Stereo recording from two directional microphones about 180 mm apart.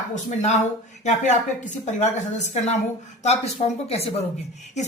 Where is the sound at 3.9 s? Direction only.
35° left (ahead or behind).